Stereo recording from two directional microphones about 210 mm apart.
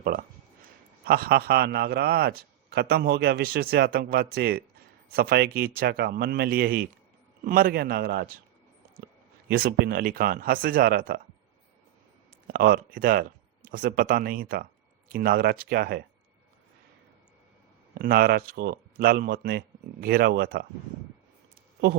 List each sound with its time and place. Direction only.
0.0 s a man's voice: 40° right (ahead or behind)
9.5 s a man's voice: 50° right (ahead or behind)
12.5 s a man's voice: 45° right (ahead or behind)
17.9 s a man's voice: 45° right (ahead or behind)